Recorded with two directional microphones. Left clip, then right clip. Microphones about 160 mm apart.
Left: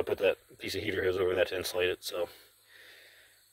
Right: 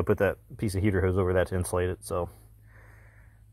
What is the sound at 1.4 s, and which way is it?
Speech, 5° left (ahead or behind).